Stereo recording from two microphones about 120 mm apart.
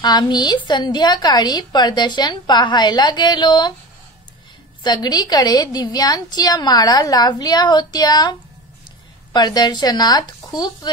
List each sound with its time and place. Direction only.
0.0 s a woman's voice: 35° left (ahead or behind)
4.8 s a woman's voice: 35° left (ahead or behind)